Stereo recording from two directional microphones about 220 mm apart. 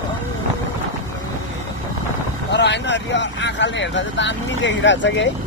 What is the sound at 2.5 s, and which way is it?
Speech, 50° left (ahead or behind).